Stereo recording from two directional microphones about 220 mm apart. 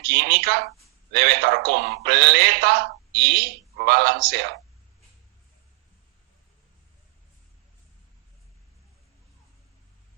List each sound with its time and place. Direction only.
0.0 s a man's voice: 50° right (ahead or behind)